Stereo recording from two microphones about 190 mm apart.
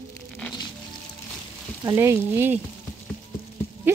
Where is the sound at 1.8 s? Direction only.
15° right (ahead or behind).